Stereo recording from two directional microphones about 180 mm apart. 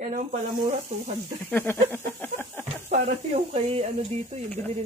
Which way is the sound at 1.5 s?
10° left (ahead or behind).